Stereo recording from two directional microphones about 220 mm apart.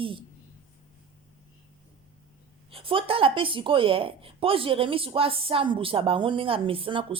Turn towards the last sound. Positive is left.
turn(degrees=-25)  # may be behind; listen again after turning